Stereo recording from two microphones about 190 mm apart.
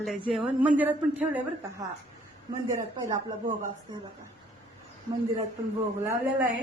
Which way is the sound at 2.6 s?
15° right (ahead or behind).